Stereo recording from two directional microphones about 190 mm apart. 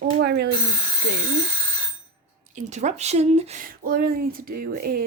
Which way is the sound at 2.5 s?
40° right (ahead or behind).